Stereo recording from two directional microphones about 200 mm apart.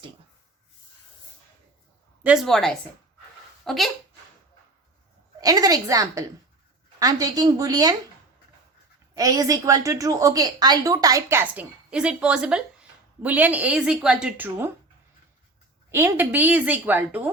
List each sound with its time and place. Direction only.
2.2 s a woman's voice: centre (ahead or behind)
5.4 s a woman's voice: 20° right (ahead or behind)
9.1 s a woman's voice: 15° right (ahead or behind)
15.9 s a woman's voice: 10° right (ahead or behind)